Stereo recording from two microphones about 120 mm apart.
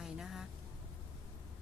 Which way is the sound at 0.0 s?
5° right (ahead or behind).